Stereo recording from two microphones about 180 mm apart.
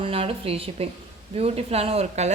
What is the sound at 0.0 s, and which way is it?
A woman's voice, 30° right (ahead or behind).